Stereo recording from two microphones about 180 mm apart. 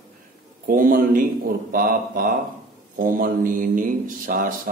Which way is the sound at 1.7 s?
50° right (ahead or behind).